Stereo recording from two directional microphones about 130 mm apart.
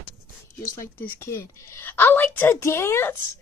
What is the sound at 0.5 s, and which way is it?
A woman's voice, 20° left (ahead or behind).